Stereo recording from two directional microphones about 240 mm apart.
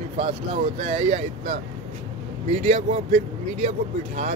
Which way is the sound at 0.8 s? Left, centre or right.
Right.